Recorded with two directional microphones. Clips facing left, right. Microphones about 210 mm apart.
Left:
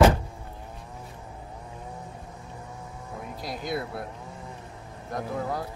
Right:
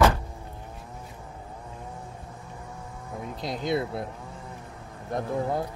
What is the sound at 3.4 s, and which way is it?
Speech, 25° right (ahead or behind).